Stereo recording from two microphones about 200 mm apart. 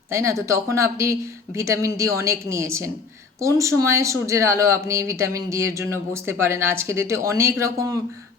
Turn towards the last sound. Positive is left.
turn(degrees=-15)  # may be behind; listen again after turning